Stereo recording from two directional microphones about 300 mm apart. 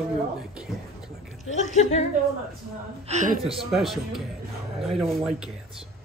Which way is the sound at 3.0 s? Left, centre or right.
Right.